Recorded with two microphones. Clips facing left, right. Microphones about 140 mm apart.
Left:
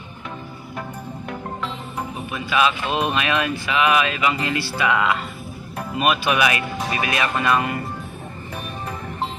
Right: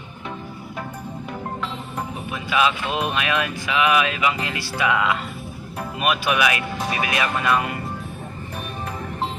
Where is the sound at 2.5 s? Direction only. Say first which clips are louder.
Left 1 dB; 15° right (ahead or behind).